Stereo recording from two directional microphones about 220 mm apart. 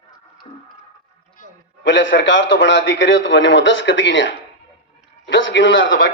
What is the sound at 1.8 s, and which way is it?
A man's voice, 55° left (ahead or behind).